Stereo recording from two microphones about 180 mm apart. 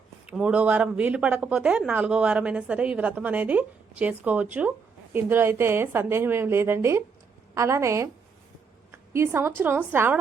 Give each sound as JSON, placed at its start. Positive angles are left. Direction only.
{"t": 0.3, "sound": "speech", "side_deg": -5}
{"t": 8.9, "sound": "a sound", "side_deg": -15}
{"t": 9.6, "sound": "speech", "side_deg": -10}